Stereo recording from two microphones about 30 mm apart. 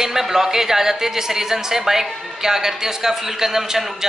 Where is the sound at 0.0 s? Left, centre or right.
Centre.